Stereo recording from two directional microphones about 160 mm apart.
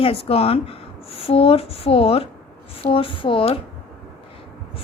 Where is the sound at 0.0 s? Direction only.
35° left (ahead or behind).